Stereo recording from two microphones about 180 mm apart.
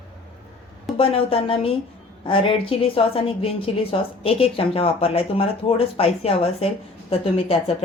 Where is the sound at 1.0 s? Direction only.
30° left (ahead or behind).